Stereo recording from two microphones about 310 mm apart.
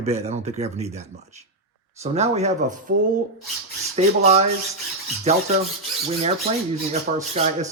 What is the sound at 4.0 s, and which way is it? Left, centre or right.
Speech, right.